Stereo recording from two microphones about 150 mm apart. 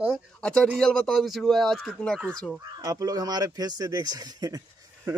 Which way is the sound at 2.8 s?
25° right (ahead or behind).